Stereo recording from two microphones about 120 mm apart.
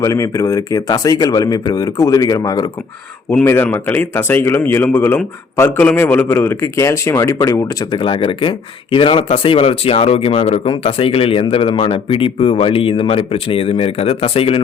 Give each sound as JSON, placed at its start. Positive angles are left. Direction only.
{"t": 0.0, "sound": "speech", "side_deg": 25}
{"t": 3.2, "sound": "speech", "side_deg": 20}